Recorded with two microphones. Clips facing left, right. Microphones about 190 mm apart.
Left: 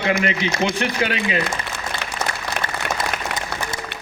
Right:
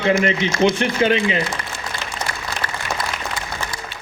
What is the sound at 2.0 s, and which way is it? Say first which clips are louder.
Applause: left 2 dB; 60° left (ahead or behind).